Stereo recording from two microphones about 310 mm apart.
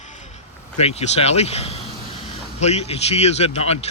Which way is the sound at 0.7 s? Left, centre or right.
Centre.